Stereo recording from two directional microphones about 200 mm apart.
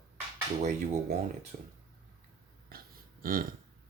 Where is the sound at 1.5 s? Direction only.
40° right (ahead or behind).